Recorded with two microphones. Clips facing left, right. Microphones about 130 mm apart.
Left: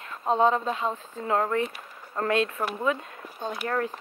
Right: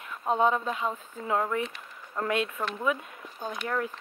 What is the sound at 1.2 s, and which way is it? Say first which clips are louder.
Speech: left 3 dB; 45° left (ahead or behind).